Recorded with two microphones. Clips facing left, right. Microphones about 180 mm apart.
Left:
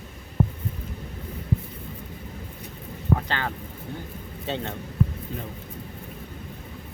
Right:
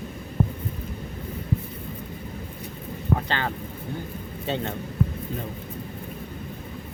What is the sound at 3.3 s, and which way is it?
Speech, 30° right (ahead or behind).